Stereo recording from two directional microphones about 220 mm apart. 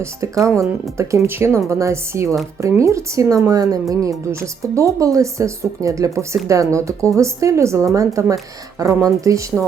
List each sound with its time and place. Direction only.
0.0 s speech: 15° right (ahead or behind)